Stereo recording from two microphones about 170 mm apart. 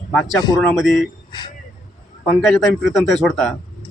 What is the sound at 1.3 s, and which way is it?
Speech, 25° left (ahead or behind).